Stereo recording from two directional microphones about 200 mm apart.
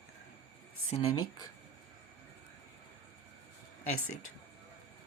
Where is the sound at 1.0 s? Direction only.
20° left (ahead or behind).